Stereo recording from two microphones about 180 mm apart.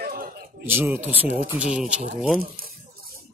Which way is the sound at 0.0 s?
55° right (ahead or behind).